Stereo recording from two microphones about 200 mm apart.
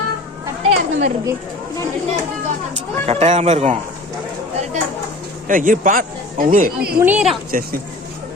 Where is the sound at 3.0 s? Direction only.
35° right (ahead or behind).